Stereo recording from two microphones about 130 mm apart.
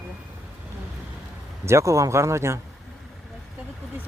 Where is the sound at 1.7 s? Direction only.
25° right (ahead or behind).